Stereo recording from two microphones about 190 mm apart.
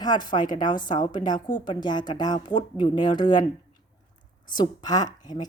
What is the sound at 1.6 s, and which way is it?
Speech, 25° left (ahead or behind).